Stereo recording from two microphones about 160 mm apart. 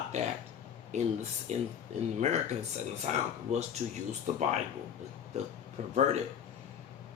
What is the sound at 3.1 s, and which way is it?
Speech, 40° right (ahead or behind).